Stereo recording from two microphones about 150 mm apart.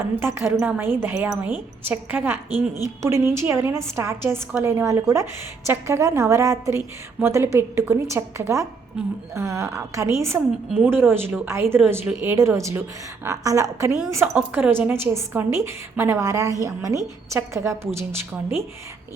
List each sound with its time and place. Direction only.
0.0 s a woman's voice: 15° right (ahead or behind)